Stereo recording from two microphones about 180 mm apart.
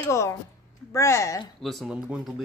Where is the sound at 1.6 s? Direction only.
Centre (ahead or behind).